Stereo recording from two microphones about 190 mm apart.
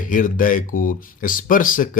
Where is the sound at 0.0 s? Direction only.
45° left (ahead or behind).